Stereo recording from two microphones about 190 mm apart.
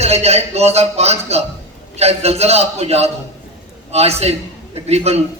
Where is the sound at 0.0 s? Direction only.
35° right (ahead or behind).